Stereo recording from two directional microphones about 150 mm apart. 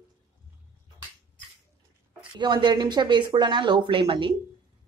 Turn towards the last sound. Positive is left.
turn(degrees=-35)  # may be behind; listen again after turning